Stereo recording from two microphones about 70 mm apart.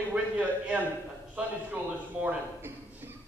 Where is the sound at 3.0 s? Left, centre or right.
Right.